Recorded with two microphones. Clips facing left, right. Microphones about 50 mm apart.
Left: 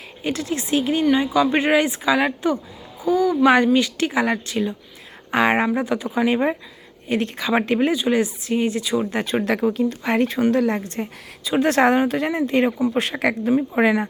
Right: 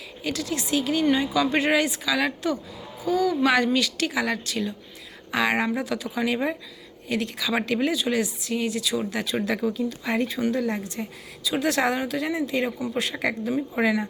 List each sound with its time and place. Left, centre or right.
0.3 s a woman's voice: left
5.3 s a woman's voice: left